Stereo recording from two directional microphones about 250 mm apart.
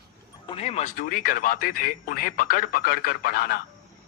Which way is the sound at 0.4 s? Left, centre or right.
Left.